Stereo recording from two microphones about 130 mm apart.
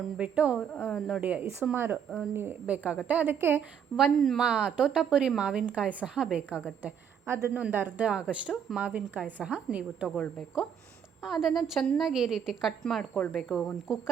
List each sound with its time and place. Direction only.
0.2 s a woman's voice: 10° right (ahead or behind)
1.2 s a woman's voice: 15° right (ahead or behind)
3.9 s a woman's voice: centre (ahead or behind)